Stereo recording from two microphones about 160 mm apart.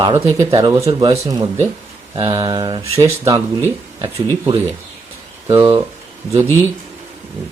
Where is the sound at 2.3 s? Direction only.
25° right (ahead or behind).